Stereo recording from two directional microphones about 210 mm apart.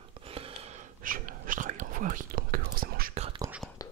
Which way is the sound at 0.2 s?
30° right (ahead or behind).